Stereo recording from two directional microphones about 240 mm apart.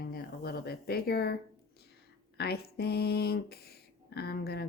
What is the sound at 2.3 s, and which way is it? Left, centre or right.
Speech, left.